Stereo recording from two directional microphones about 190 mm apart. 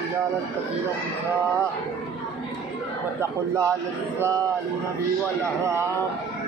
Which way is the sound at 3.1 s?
15° right (ahead or behind).